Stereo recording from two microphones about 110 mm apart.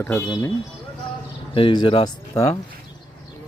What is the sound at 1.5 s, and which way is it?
Speech, 50° left (ahead or behind).